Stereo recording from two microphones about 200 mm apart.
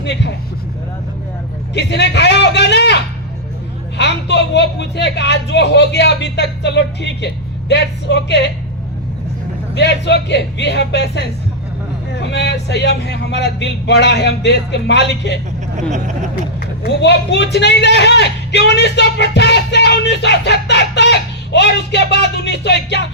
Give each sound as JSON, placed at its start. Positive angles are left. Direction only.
{"t": 0.0, "sound": "speech", "side_deg": 60}
{"t": 1.7, "sound": "speech", "side_deg": 60}
{"t": 9.7, "sound": "speech", "side_deg": 60}
{"t": 15.9, "sound": "speech", "side_deg": -35}
{"t": 16.8, "sound": "speech", "side_deg": 60}